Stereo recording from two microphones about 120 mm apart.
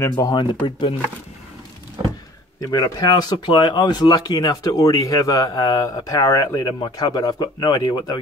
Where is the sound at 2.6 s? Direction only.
30° left (ahead or behind).